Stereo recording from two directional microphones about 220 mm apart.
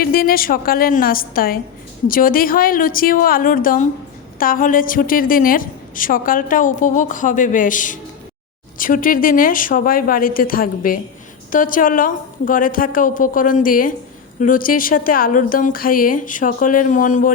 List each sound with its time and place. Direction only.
0.0 s a woman's voice: 40° left (ahead or behind)